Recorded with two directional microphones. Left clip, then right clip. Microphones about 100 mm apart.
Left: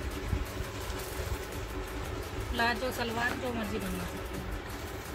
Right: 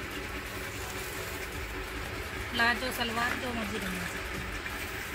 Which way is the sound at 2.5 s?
55° left (ahead or behind).